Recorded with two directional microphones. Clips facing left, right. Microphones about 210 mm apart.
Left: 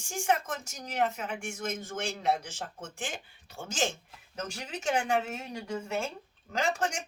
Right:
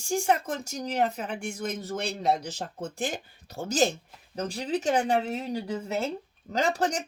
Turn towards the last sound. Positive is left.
turn(degrees=-35)  # may be behind; listen again after turning